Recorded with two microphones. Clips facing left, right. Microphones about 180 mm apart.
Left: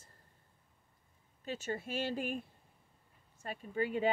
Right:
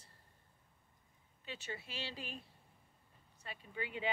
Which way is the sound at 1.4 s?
45° left (ahead or behind).